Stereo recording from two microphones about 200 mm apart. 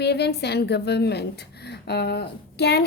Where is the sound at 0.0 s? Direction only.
55° left (ahead or behind).